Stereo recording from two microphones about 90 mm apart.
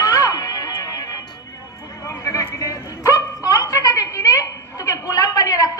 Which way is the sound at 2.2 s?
40° left (ahead or behind).